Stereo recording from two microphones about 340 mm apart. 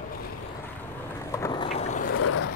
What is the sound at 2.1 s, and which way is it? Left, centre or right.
Boat, left.